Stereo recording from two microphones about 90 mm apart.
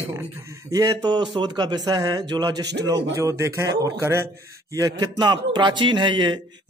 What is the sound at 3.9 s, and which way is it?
Speech, 30° right (ahead or behind).